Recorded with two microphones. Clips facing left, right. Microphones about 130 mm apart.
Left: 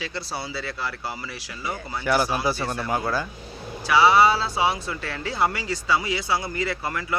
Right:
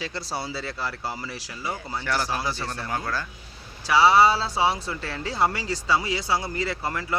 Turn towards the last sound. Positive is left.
turn(degrees=-30)  # may be behind; listen again after turning